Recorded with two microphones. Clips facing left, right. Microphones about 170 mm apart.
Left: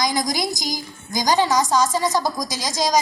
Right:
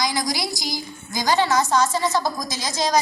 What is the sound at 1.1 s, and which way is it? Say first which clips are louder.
A woman's voice: left 1 dB; 15° left (ahead or behind).